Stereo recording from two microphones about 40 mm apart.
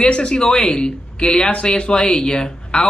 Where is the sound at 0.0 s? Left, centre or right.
Left.